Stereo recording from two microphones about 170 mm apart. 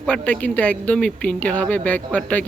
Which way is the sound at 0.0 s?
5° left (ahead or behind).